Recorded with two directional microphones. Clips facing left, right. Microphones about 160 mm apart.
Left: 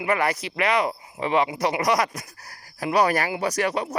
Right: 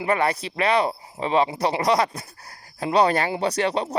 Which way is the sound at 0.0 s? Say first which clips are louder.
Right 1 dB; 30° right (ahead or behind).